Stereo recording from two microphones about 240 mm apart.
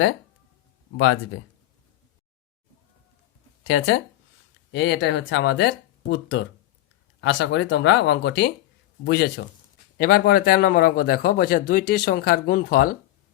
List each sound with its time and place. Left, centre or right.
0.9 s speech: left
3.7 s speech: left
7.2 s a man's voice: left